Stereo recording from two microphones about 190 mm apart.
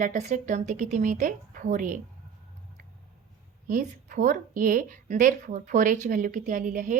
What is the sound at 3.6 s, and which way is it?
A woman's voice, 45° right (ahead or behind).